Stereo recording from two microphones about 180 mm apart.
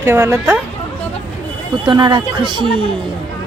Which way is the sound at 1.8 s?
25° right (ahead or behind).